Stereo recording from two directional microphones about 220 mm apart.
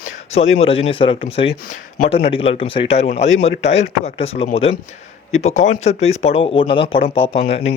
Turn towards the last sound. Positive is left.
turn(degrees=25)  # may be behind; listen again after turning